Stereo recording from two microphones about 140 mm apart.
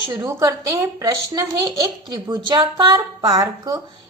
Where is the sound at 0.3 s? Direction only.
20° right (ahead or behind).